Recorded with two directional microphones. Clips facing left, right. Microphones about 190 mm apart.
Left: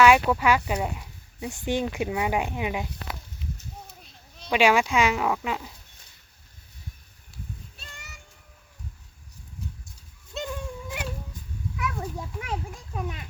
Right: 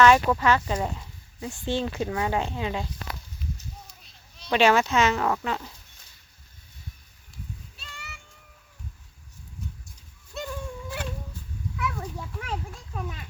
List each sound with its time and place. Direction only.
0.0 s speech: 10° left (ahead or behind)
4.4 s speech: 10° left (ahead or behind)
7.8 s music: 45° left (ahead or behind)
10.3 s goat: 20° left (ahead or behind)
11.8 s children playing: 15° left (ahead or behind)